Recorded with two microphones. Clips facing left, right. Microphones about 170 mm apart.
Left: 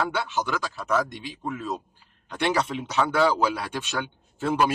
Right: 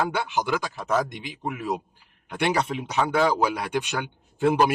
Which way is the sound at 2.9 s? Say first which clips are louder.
Even; 15° right (ahead or behind).